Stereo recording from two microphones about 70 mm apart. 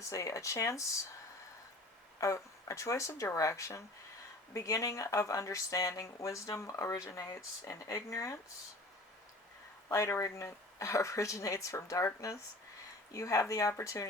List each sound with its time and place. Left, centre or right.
0.0 s speech: left
2.2 s speech: left
9.9 s speech: left